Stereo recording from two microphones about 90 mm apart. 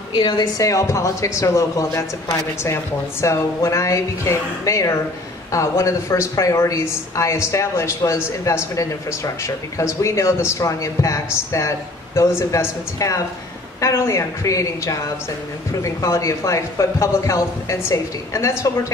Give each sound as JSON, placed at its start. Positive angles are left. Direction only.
{"t": 0.1, "sound": "speech", "side_deg": 60}